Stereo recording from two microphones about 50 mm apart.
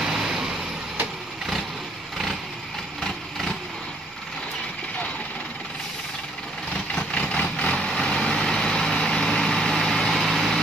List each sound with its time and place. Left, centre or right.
0.0 s vehicle: centre
3.0 s vehicle: centre
6.7 s vehicle: centre
7.2 s vehicle: left; by 10.6 s centre